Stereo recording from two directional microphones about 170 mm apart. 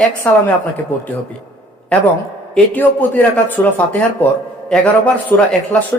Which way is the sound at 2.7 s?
10° left (ahead or behind).